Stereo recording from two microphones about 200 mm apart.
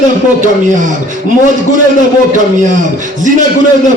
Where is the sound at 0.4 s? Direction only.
40° right (ahead or behind).